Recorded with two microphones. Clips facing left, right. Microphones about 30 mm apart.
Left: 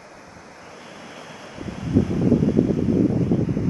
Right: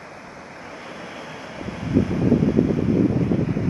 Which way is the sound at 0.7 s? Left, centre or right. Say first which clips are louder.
Right 4 dB; right.